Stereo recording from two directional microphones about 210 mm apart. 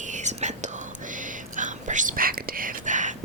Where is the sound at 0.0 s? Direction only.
35° right (ahead or behind).